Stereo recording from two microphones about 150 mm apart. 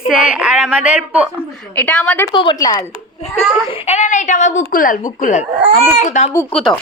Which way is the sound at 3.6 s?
40° left (ahead or behind).